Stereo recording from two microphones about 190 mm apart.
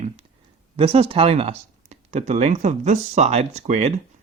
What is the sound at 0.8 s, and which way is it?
Speech, 30° right (ahead or behind).